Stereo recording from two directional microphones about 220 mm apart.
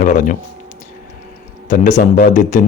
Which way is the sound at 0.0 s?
35° left (ahead or behind).